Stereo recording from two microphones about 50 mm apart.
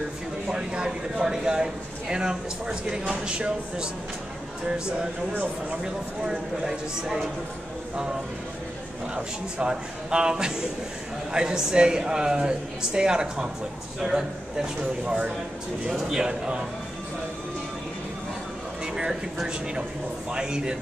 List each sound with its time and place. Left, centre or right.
0.5 s speech: centre
5.3 s speech: right
6.2 s speech: centre
9.1 s speech: centre
15.0 s speech: right
20.2 s speech: centre